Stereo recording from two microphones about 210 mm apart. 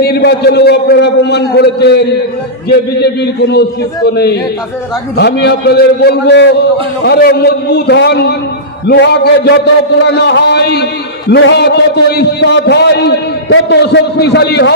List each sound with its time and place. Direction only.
0.0 s a man's voice: 50° left (ahead or behind)
5.1 s a man's voice: 55° left (ahead or behind)